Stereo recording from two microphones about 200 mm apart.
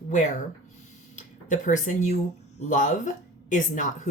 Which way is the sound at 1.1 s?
40° left (ahead or behind).